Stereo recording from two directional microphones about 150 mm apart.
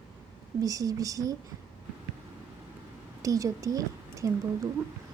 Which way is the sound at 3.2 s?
20° right (ahead or behind).